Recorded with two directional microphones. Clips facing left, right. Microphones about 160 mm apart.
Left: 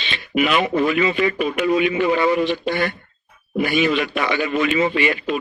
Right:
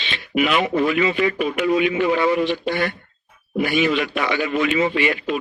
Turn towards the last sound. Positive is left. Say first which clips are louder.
# left 1 dB
turn(degrees=40)  # may be behind; listen again after turning